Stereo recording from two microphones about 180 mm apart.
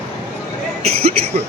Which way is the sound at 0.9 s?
35° right (ahead or behind).